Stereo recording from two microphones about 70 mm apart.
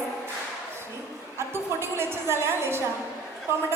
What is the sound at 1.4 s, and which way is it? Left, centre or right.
A woman's voice, right.